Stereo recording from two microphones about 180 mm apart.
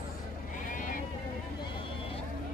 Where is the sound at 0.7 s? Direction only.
50° left (ahead or behind).